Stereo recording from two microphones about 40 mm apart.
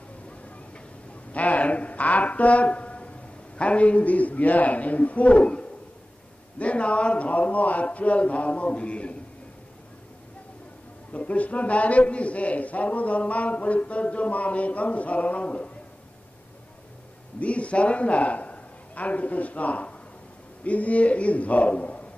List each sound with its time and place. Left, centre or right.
1.3 s a man's voice: left
11.1 s a man's voice: left
17.4 s a man's voice: left